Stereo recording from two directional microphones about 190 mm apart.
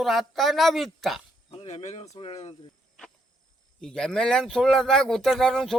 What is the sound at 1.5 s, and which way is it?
Speech, 35° left (ahead or behind).